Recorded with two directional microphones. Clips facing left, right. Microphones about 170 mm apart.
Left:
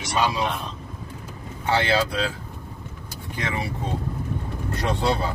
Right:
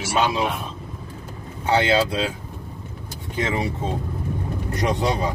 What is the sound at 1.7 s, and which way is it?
Speech, 20° right (ahead or behind).